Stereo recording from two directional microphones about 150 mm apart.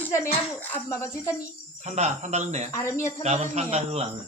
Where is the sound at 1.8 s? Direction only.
50° right (ahead or behind).